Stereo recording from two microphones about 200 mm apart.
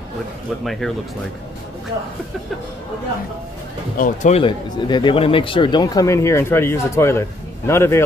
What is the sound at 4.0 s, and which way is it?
Speech, 35° left (ahead or behind).